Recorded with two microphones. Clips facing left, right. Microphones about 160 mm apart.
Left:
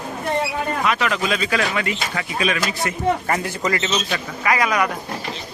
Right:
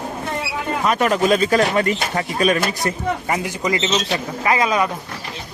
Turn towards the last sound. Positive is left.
turn(degrees=-25)  # may be behind; listen again after turning